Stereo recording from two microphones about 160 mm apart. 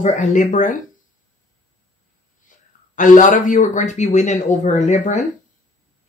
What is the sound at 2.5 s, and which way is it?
Speech, 55° left (ahead or behind).